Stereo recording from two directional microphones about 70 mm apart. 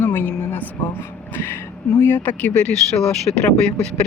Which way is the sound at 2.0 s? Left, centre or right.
Left.